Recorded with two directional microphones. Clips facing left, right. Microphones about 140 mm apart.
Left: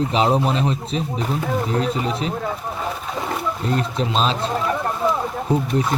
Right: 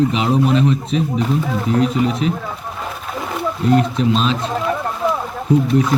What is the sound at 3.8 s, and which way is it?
Speech, 35° left (ahead or behind).